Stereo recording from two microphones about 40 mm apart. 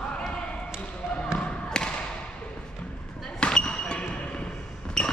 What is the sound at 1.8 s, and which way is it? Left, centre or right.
Thump, centre.